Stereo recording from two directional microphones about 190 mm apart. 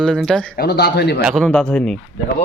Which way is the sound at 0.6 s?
55° left (ahead or behind).